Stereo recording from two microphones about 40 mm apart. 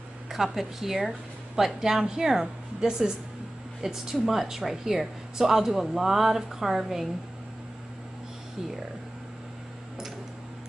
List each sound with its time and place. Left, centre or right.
0.3 s a woman's voice: centre